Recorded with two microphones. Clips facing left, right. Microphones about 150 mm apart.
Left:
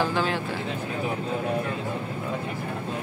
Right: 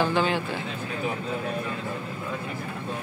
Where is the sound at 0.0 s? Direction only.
Centre (ahead or behind).